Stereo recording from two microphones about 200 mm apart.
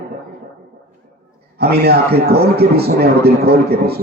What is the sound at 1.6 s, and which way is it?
A man's voice, 50° right (ahead or behind).